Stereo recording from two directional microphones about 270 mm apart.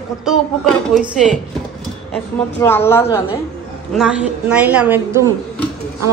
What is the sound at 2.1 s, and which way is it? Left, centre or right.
A woman's voice, centre.